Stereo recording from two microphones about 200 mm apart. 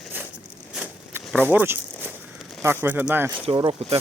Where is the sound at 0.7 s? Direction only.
5° right (ahead or behind).